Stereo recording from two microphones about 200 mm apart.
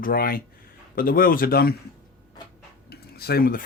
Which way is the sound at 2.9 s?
50° left (ahead or behind).